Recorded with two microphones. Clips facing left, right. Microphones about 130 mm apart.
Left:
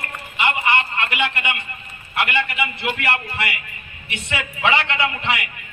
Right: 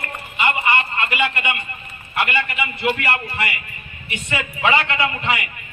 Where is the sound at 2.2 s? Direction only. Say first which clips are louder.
Left 1 dB; 5° left (ahead or behind).